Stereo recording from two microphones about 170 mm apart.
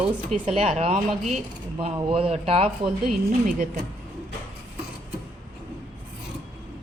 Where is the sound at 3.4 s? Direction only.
50° right (ahead or behind).